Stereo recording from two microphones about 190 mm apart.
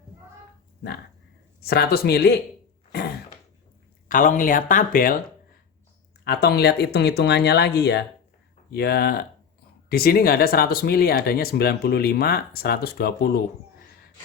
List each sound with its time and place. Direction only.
1.6 s speech: 55° left (ahead or behind)
4.1 s speech: 45° left (ahead or behind)
6.2 s speech: 60° left (ahead or behind)